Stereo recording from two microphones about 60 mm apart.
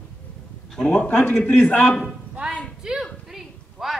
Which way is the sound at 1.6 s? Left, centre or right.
Centre.